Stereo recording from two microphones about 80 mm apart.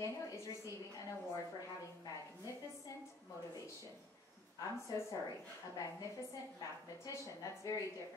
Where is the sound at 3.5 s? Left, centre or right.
Left.